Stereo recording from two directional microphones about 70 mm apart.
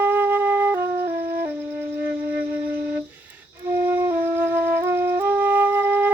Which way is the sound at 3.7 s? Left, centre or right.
Right.